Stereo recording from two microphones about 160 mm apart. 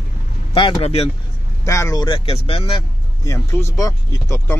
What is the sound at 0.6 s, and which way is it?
Speech, 35° left (ahead or behind).